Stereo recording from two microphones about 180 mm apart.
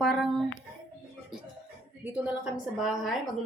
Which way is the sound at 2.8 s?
Centre (ahead or behind).